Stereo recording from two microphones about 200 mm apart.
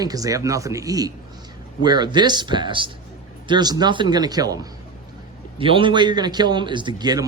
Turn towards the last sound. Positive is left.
turn(degrees=-20)  # may be behind; listen again after turning